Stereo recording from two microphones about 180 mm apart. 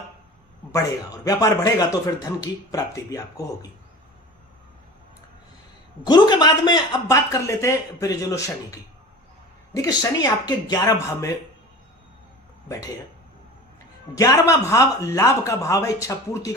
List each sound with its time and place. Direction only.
0.7 s speech: 20° left (ahead or behind)
6.1 s speech: 25° left (ahead or behind)
12.6 s speech: 15° left (ahead or behind)
14.2 s speech: 15° left (ahead or behind)